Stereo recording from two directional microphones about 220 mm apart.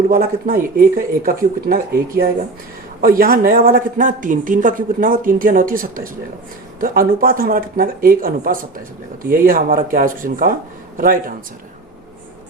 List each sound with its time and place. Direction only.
0.1 s speech: 40° right (ahead or behind)